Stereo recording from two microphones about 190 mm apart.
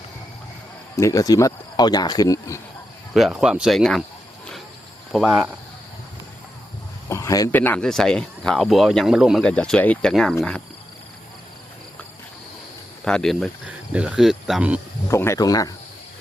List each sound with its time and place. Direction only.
0.9 s speech: 15° left (ahead or behind)
3.2 s speech: centre (ahead or behind)
5.1 s speech: 5° right (ahead or behind)
7.1 s speech: 15° left (ahead or behind)
13.1 s speech: 5° left (ahead or behind)
15.0 s speech: 15° left (ahead or behind)